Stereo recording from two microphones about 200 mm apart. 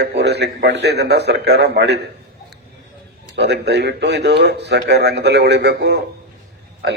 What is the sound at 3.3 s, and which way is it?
A man's voice, 55° right (ahead or behind).